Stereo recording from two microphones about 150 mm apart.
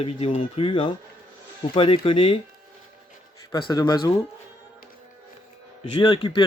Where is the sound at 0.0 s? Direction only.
40° left (ahead or behind).